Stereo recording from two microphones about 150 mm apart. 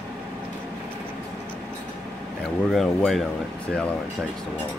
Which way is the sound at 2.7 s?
Centre (ahead or behind).